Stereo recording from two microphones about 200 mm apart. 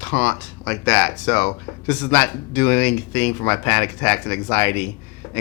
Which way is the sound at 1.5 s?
20° left (ahead or behind).